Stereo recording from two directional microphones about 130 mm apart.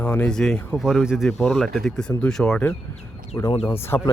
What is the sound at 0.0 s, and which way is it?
Speech, 10° left (ahead or behind).